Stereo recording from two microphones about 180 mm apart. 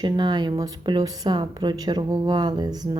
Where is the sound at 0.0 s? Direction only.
25° right (ahead or behind).